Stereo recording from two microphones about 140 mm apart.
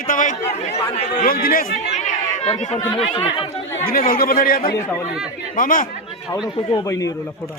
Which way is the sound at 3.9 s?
90° left.